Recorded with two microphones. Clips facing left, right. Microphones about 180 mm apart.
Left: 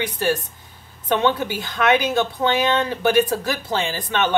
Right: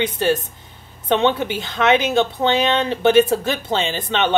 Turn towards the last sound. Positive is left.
turn(degrees=-20)  # may be behind; listen again after turning